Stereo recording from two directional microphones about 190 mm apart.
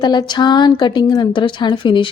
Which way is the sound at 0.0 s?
25° left (ahead or behind).